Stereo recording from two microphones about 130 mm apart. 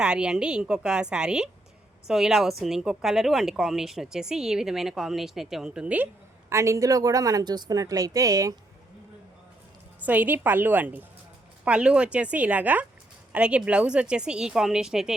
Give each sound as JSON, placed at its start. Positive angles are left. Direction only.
{"t": 0.0, "sound": "a woman's voice", "side_deg": -5}
{"t": 6.5, "sound": "a woman's voice", "side_deg": -25}
{"t": 10.0, "sound": "a woman's voice", "side_deg": -10}